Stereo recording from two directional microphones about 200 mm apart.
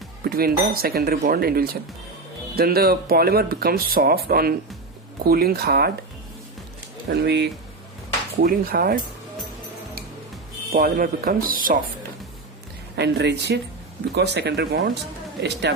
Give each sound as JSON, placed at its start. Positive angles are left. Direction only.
{"t": 0.3, "sound": "speech", "side_deg": -50}
{"t": 7.1, "sound": "speech", "side_deg": -55}
{"t": 10.7, "sound": "speech", "side_deg": -45}
{"t": 13.0, "sound": "speech", "side_deg": -60}